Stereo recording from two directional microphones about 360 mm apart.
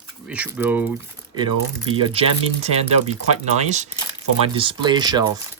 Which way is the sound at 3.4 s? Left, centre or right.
Centre.